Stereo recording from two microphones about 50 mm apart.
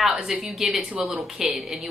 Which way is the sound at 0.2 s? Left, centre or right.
Centre.